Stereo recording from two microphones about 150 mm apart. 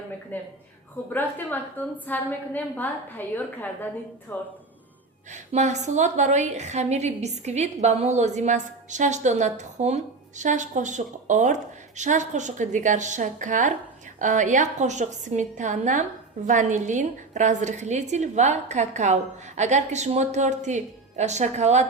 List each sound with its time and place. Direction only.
0.3 s a woman's voice: 10° left (ahead or behind)
5.3 s a woman's voice: 50° right (ahead or behind)